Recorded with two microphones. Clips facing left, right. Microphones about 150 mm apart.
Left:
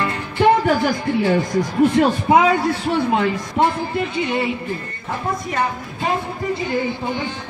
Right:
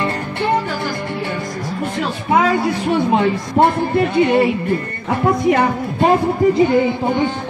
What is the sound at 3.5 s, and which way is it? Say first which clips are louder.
Speech: right 6 dB; 60° right (ahead or behind).